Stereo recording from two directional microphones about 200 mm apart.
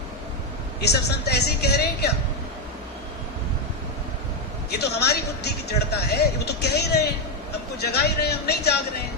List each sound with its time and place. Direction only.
0.8 s a woman's voice: 55° left (ahead or behind)
4.7 s a woman's voice: 55° left (ahead or behind)